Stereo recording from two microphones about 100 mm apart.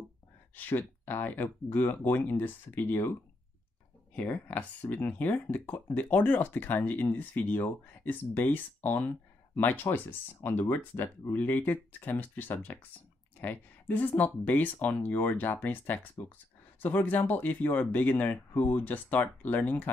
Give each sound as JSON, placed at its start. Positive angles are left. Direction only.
{"t": 0.6, "sound": "speech", "side_deg": 20}